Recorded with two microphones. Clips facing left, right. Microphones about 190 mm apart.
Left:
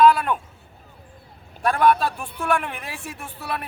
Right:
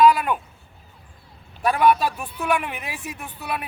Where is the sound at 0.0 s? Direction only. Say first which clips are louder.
Even; 5° right (ahead or behind).